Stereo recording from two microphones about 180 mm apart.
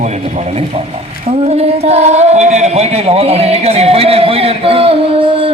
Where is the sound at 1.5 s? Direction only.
35° right (ahead or behind).